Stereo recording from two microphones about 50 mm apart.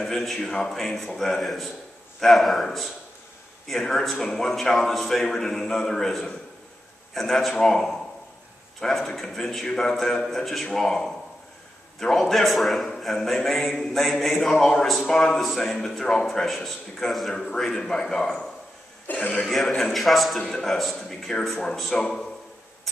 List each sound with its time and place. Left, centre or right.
0.0 s a man's voice: centre
19.0 s a man's voice: left
19.4 s a man's voice: centre